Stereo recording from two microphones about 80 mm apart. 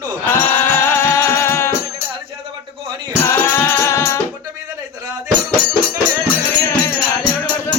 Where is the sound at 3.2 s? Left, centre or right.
Left.